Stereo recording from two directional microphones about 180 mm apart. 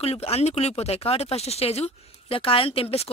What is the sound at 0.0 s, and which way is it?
Speech, 35° left (ahead or behind).